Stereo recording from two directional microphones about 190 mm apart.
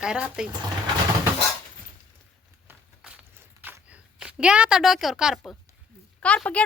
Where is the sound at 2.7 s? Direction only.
5° right (ahead or behind).